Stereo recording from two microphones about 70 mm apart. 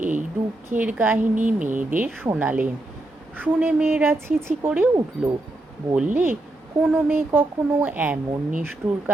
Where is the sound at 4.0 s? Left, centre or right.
Right.